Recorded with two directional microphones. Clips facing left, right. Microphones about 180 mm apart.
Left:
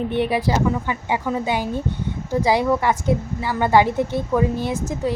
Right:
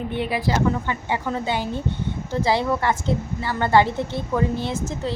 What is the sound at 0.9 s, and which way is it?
A woman's voice, 15° left (ahead or behind).